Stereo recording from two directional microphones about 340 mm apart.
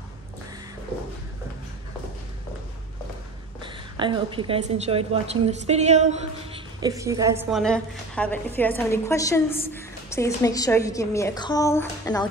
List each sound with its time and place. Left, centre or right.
3.6 s a woman's voice: centre